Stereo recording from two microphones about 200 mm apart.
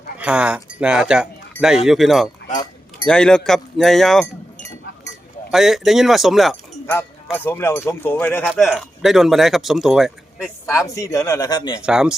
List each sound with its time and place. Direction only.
0.2 s speech: 5° right (ahead or behind)
5.5 s speech: centre (ahead or behind)
7.3 s speech: 10° left (ahead or behind)
8.4 s speech: centre (ahead or behind)
10.8 s speech: 15° left (ahead or behind)
11.8 s speech: 5° right (ahead or behind)